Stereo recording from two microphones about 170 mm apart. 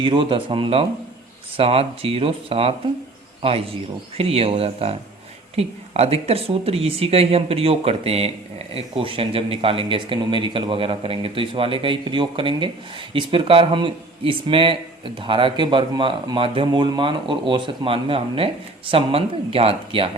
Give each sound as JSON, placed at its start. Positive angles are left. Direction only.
{"t": 0.0, "sound": "speech", "side_deg": -30}